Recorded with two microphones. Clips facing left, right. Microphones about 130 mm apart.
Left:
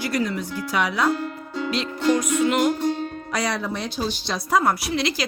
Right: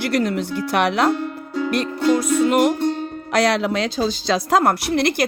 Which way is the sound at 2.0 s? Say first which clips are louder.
Right 3 dB; 30° right (ahead or behind).